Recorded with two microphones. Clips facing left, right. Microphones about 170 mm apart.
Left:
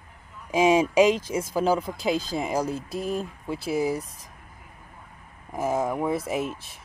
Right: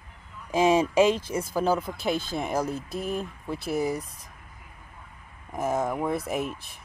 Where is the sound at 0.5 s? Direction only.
10° left (ahead or behind).